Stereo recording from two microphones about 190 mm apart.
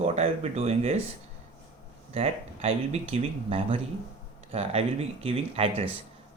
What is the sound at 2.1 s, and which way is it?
Speech, 30° right (ahead or behind).